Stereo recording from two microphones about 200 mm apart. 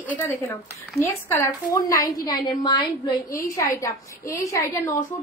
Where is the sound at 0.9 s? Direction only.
10° left (ahead or behind).